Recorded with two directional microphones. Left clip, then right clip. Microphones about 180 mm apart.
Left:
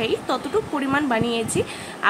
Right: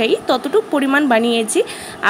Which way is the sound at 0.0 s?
35° right (ahead or behind).